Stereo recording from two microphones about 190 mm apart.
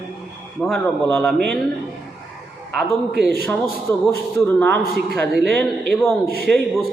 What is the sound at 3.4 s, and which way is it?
Speech, 10° left (ahead or behind).